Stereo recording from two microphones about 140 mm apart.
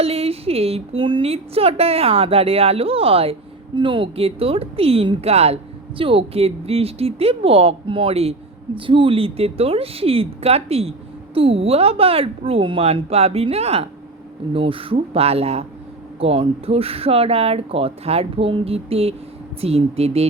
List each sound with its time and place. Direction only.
0.0 s a woman's voice: 45° right (ahead or behind)